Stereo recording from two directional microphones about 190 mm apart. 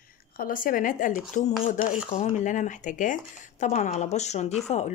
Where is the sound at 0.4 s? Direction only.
45° left (ahead or behind).